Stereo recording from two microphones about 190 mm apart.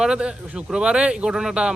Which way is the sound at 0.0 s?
5° right (ahead or behind).